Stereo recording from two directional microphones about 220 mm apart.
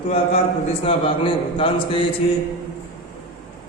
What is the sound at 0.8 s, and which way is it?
Speech, 25° left (ahead or behind).